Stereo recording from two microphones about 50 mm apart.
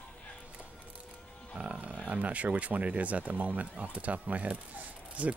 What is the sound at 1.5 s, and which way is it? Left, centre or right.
Speech, right.